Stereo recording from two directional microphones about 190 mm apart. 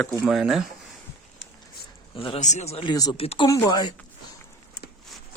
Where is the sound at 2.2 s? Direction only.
35° left (ahead or behind).